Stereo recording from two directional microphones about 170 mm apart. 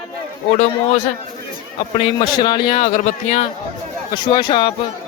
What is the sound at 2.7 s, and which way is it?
Speech, 40° left (ahead or behind).